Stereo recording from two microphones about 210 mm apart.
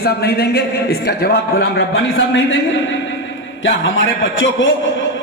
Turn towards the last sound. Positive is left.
turn(degrees=60)  # may be behind; listen again after turning